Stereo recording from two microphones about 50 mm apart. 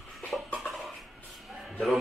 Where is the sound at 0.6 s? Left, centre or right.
Centre.